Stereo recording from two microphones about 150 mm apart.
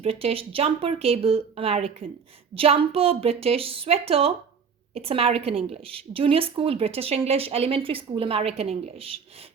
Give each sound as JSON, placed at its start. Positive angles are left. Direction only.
{"t": 0.0, "sound": "a woman's voice", "side_deg": -40}